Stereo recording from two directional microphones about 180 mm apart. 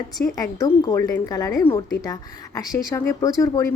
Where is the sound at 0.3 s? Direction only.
20° left (ahead or behind).